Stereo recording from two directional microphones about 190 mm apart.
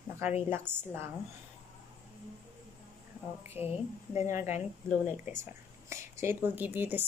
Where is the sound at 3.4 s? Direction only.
10° right (ahead or behind).